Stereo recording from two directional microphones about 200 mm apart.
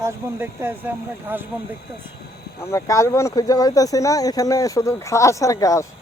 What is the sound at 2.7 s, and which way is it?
Speech, 15° left (ahead or behind).